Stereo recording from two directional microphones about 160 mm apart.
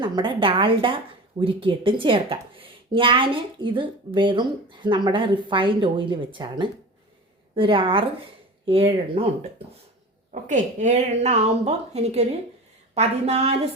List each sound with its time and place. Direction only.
0.0 s speech: 30° right (ahead or behind)
10.4 s a woman's voice: 50° right (ahead or behind)